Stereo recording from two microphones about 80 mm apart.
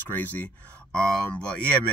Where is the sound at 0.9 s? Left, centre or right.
Centre.